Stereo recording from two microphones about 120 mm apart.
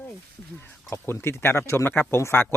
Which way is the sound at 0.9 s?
20° left (ahead or behind).